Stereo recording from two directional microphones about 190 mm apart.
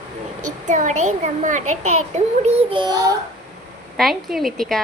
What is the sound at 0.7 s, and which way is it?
A child's voice, 40° right (ahead or behind).